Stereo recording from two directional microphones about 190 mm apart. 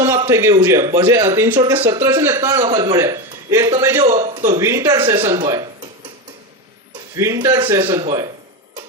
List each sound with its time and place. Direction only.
0.3 s speech: 15° right (ahead or behind)
1.9 s speech: 20° right (ahead or behind)
4.0 s speech: 30° right (ahead or behind)
4.5 s speech: 15° right (ahead or behind)
7.2 s speech: 15° right (ahead or behind)